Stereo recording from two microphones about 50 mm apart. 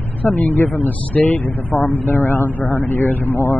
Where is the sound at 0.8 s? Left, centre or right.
Left.